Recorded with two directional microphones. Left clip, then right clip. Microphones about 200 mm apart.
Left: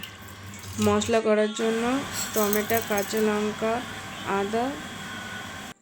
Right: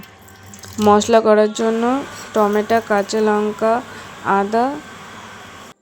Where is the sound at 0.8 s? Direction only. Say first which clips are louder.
Right 11 dB; 30° right (ahead or behind).